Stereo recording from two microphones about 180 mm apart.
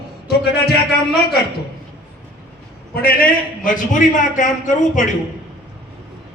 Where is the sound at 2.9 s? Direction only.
55° left (ahead or behind).